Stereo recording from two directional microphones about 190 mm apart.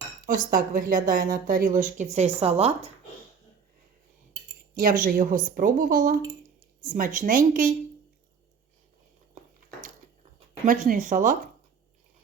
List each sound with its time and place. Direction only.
0.3 s a woman's voice: 45° right (ahead or behind)
4.7 s a woman's voice: 45° right (ahead or behind)
10.7 s a woman's voice: 45° right (ahead or behind)